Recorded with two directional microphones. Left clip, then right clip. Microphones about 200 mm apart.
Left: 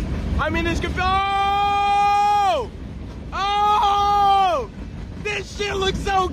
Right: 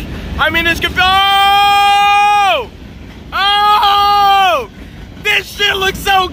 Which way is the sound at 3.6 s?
Centre (ahead or behind).